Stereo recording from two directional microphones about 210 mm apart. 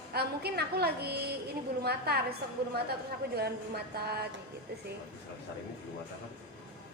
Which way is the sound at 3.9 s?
50° right (ahead or behind).